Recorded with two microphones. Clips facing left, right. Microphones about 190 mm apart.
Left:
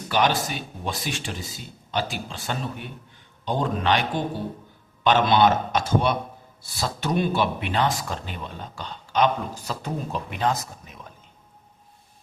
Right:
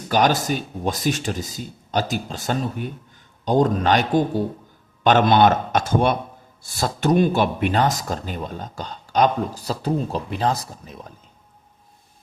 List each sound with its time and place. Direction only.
0.1 s a man's voice: 40° right (ahead or behind)